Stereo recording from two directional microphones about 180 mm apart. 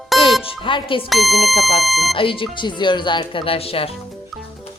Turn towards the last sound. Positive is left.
turn(degrees=30)  # may be behind; listen again after turning